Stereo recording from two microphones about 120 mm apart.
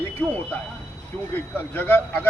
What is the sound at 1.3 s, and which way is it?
Speech, 15° left (ahead or behind).